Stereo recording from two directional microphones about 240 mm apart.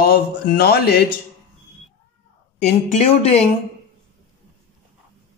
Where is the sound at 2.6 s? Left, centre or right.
Left.